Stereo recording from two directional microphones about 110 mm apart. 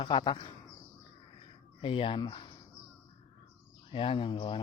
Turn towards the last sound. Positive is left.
turn(degrees=50)  # may be behind; listen again after turning